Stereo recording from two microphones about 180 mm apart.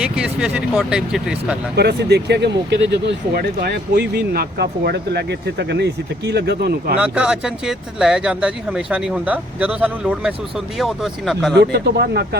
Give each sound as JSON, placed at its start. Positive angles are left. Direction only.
{"t": 0.0, "sound": "speech", "side_deg": -5}
{"t": 1.7, "sound": "speech", "side_deg": -65}
{"t": 6.9, "sound": "speech", "side_deg": -5}
{"t": 11.5, "sound": "speech", "side_deg": -65}